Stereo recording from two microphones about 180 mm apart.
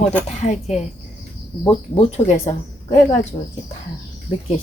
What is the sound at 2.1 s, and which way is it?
A woman's voice, 40° left (ahead or behind).